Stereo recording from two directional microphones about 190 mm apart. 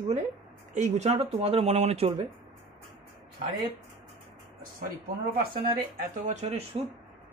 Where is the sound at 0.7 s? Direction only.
35° right (ahead or behind).